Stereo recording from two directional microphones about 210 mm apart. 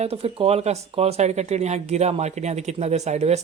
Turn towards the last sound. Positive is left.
turn(degrees=-30)  # may be behind; listen again after turning